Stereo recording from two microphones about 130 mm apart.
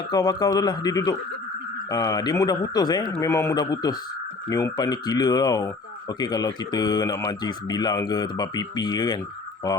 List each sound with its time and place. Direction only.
0.1 s speech: 30° left (ahead or behind)